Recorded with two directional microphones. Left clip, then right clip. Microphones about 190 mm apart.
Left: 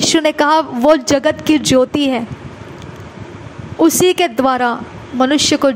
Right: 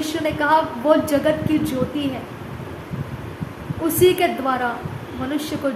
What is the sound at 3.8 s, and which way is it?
A woman's voice, 55° left (ahead or behind).